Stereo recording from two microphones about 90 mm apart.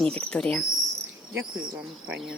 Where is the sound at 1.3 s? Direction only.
10° right (ahead or behind).